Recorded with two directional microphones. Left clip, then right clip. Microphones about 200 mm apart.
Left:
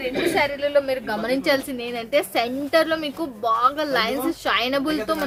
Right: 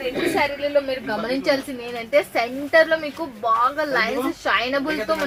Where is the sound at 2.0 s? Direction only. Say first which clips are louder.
Right 2 dB; 25° left (ahead or behind).